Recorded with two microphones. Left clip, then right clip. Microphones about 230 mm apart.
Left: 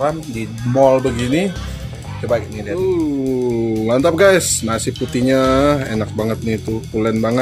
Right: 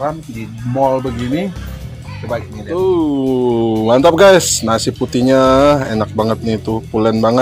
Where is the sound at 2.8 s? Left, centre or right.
Centre.